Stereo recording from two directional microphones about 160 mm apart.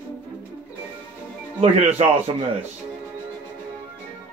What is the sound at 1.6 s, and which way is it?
Speech, 45° right (ahead or behind).